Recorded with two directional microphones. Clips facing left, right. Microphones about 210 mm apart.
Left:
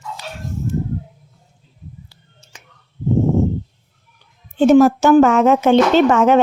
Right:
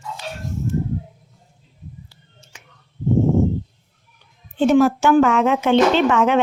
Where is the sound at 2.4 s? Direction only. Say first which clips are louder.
Left 2 dB; 40° left (ahead or behind).